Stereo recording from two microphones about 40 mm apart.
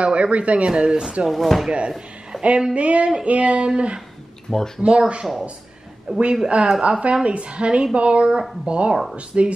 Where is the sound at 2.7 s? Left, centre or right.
Right.